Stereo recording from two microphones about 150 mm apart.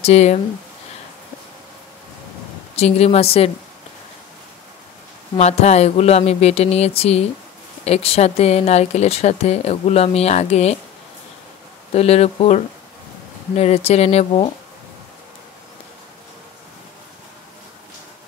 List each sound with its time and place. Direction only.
0.0 s speech: 45° left (ahead or behind)
2.7 s speech: 45° left (ahead or behind)
5.4 s speech: 45° left (ahead or behind)
11.9 s speech: 45° left (ahead or behind)